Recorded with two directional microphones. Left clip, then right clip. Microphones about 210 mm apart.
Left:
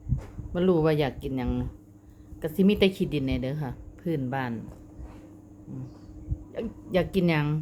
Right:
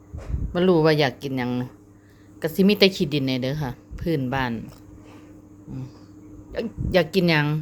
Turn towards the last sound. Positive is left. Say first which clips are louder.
# right 6 dB
turn(degrees=-15)  # may be behind; listen again after turning